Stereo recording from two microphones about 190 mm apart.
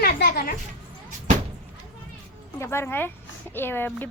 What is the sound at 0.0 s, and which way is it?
Speech, 50° left (ahead or behind).